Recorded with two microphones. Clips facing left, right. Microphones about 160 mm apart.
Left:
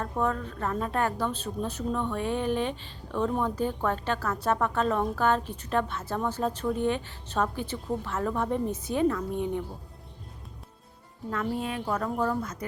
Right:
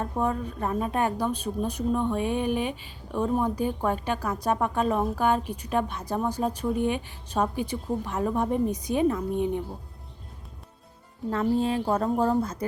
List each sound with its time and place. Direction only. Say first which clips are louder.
0.0 s a woman's voice: right 1 dB; 15° right (ahead or behind)
11.3 s speech: right 6 dB; 30° right (ahead or behind)